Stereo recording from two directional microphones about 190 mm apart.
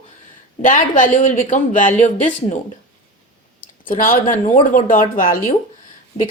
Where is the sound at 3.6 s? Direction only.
45° left (ahead or behind).